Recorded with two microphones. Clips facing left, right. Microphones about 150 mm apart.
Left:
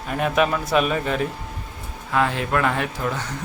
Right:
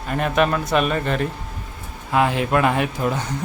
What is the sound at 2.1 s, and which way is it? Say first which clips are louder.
Speech: right 3 dB; 15° right (ahead or behind).